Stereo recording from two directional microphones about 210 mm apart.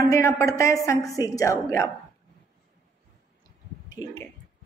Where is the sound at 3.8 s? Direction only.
10° left (ahead or behind).